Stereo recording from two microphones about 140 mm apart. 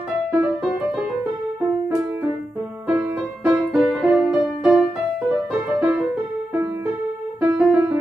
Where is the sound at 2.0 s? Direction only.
20° right (ahead or behind).